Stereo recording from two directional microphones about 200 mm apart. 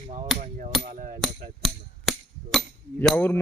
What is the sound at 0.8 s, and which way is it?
Hammer, 40° right (ahead or behind).